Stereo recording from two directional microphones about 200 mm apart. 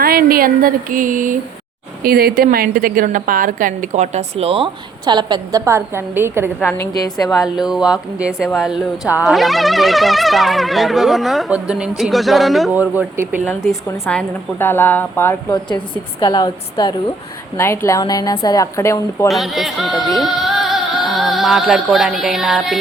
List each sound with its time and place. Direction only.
0.0 s a woman's voice: 50° right (ahead or behind); by 6.5 s 10° right (ahead or behind)
6.7 s a woman's voice: 15° left (ahead or behind)
7.3 s speech: centre (ahead or behind)
13.4 s a woman's voice: 10° left (ahead or behind)
19.3 s speech: centre (ahead or behind)
20.1 s music: centre (ahead or behind)